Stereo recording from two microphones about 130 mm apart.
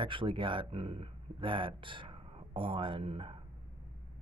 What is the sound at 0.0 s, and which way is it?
Speech, 40° right (ahead or behind).